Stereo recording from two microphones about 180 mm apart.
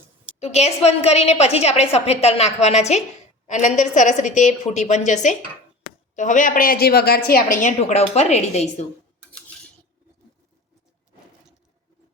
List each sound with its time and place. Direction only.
0.3 s a woman's voice: 35° left (ahead or behind)